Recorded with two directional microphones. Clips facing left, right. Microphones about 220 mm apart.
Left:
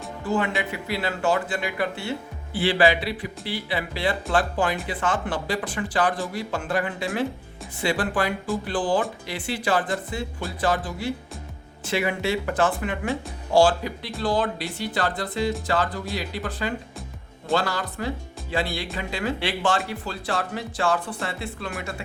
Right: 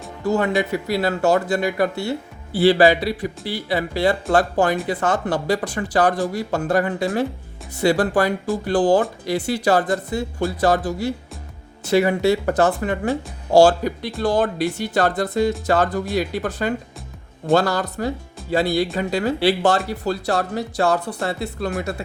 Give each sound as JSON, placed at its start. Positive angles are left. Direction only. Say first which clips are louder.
{"t": 0.3, "sound": "speech", "louder": "right 6 dB", "side_deg": -40}